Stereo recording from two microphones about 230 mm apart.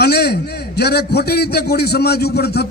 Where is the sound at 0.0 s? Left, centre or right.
Left.